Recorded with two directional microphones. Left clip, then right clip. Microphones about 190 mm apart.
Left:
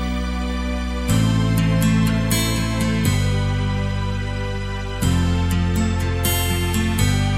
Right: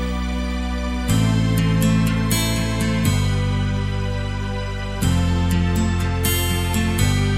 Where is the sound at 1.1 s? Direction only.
Centre (ahead or behind).